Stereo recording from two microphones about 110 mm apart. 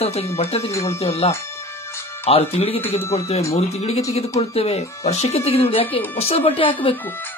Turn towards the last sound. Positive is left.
turn(degrees=55)  # may be behind; listen again after turning